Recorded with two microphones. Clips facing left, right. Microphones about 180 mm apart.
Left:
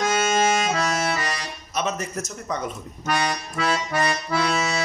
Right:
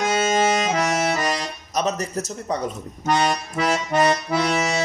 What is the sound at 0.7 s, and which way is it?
Accordion, 20° right (ahead or behind).